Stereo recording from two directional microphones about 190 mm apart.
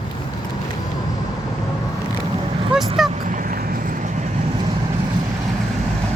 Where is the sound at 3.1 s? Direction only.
45° right (ahead or behind).